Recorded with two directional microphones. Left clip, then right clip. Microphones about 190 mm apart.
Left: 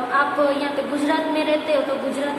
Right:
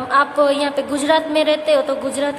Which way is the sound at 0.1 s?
50° right (ahead or behind).